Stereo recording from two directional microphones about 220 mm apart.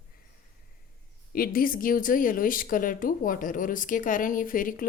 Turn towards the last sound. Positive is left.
turn(degrees=40)  # may be behind; listen again after turning